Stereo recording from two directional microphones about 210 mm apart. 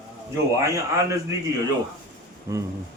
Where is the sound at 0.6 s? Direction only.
15° right (ahead or behind).